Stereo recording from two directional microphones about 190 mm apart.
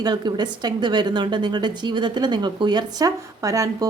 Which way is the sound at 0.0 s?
20° right (ahead or behind).